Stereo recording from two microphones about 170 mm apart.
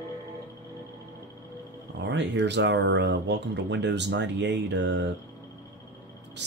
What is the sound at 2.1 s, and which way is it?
Speech, 90° right.